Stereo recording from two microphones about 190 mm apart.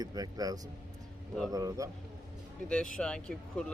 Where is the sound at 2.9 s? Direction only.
5° left (ahead or behind).